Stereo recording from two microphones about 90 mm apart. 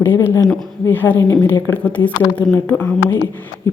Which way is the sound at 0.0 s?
25° left (ahead or behind).